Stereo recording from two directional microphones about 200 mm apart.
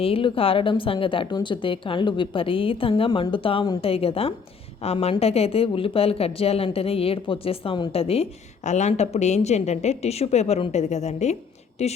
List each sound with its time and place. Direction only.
0.0 s a woman's voice: 25° left (ahead or behind)